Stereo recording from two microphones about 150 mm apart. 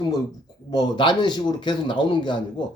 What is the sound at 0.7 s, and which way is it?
Speech, 30° left (ahead or behind).